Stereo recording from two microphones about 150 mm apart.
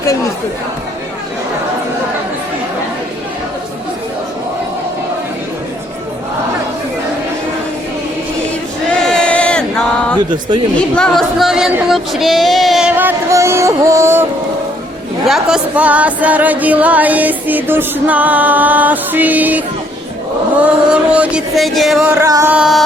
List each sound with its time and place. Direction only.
9.0 s chant: 5° left (ahead or behind)
10.8 s speech: 5° left (ahead or behind)
11.7 s child singing: centre (ahead or behind)
13.0 s music: 15° right (ahead or behind)
15.3 s music: 5° right (ahead or behind)
22.2 s music: 20° right (ahead or behind)
22.5 s speech: 5° right (ahead or behind)